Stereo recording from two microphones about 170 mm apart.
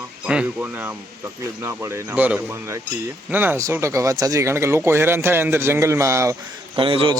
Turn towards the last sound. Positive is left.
turn(degrees=-30)  # may be behind; listen again after turning